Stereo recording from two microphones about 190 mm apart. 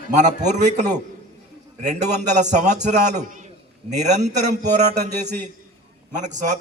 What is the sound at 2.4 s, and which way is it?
A man's voice, 40° right (ahead or behind).